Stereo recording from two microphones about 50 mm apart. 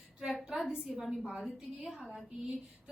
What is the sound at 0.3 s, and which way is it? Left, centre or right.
A woman's voice, centre.